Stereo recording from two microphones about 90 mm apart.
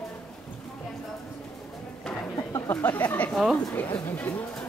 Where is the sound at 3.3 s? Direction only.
5° left (ahead or behind).